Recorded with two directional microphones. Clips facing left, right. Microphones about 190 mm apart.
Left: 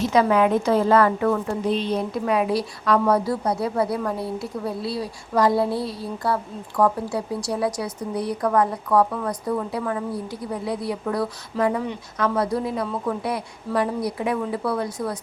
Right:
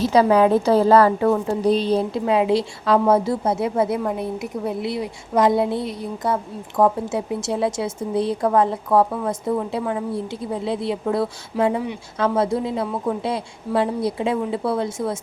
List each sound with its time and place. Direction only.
0.0 s a woman's voice: 35° right (ahead or behind)
11.5 s speech: 10° right (ahead or behind)
12.2 s a woman's voice: 25° right (ahead or behind)